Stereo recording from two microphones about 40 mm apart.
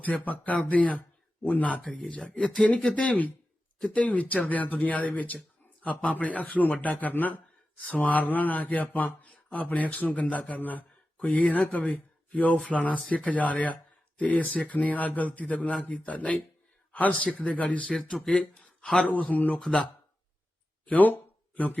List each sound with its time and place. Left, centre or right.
0.0 s speech: left
1.9 s a man's voice: left
18.3 s a sound: left
19.0 s speech: left
19.6 s speech: centre
20.8 s a sound: left